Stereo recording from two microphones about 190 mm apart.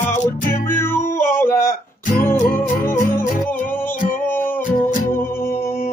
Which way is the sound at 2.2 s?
50° left (ahead or behind).